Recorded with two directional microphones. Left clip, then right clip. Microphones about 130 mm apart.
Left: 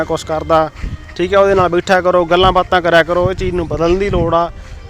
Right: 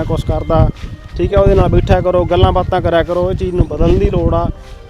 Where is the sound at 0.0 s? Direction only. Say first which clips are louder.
Left 2 dB; 25° right (ahead or behind).